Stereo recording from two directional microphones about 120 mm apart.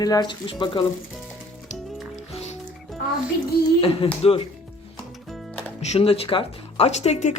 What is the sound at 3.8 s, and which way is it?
Speech, 50° left (ahead or behind).